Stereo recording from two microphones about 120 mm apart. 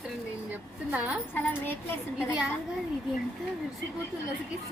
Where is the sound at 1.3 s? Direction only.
15° left (ahead or behind).